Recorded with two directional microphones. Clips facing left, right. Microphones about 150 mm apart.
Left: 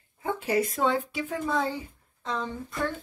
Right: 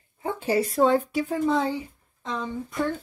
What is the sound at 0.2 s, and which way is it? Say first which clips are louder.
Speech: right 2 dB; 30° right (ahead or behind).